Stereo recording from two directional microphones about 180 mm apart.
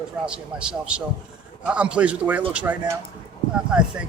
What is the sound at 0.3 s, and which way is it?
A man's voice, 5° right (ahead or behind).